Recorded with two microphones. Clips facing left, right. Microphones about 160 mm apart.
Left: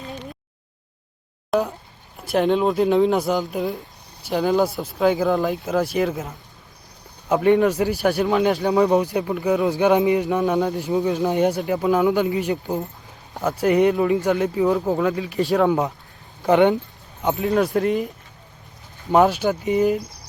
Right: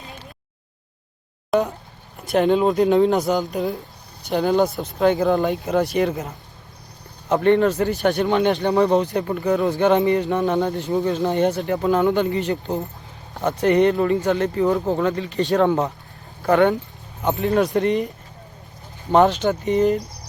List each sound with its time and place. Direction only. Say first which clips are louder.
1.5 s speech: right 1 dB; 5° left (ahead or behind)
16.4 s speech: left 1 dB; 15° left (ahead or behind)
17.2 s speech: right 1 dB; centre (ahead or behind)
19.1 s speech: right 1 dB; 10° left (ahead or behind)